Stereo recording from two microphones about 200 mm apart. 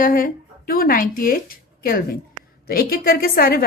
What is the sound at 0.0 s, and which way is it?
A woman's voice, 45° left (ahead or behind).